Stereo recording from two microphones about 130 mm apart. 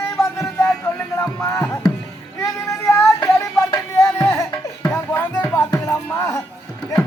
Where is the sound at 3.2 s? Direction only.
25° left (ahead or behind).